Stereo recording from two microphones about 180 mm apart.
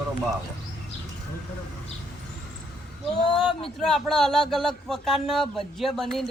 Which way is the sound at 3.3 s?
30° left (ahead or behind).